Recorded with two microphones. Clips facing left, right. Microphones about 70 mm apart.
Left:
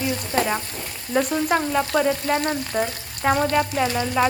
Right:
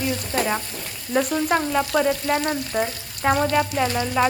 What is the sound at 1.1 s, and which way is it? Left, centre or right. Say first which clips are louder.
Frying: even; centre.